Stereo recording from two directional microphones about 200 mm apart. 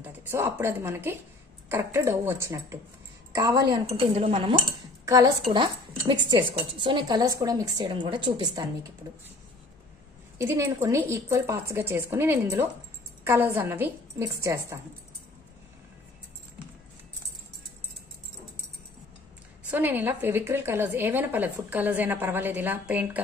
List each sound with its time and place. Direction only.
0.0 s a woman's voice: 10° right (ahead or behind)
3.8 s speech: 30° right (ahead or behind)
5.0 s a woman's voice: 15° right (ahead or behind)
10.3 s a woman's voice: 15° right (ahead or behind)
19.7 s a woman's voice: 10° right (ahead or behind)